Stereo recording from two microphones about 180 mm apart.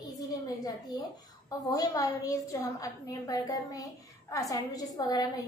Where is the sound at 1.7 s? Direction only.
20° left (ahead or behind).